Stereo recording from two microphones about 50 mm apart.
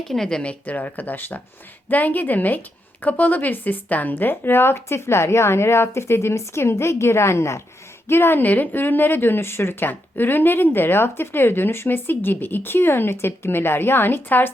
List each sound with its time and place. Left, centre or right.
0.1 s a woman's voice: centre
0.4 s speech: left
4.1 s speech: left
8.0 s speech: left